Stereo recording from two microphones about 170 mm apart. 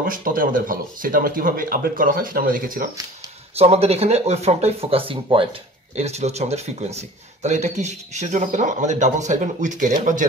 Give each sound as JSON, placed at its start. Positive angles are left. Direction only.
{"t": 0.0, "sound": "speech", "side_deg": -55}
{"t": 3.5, "sound": "speech", "side_deg": -35}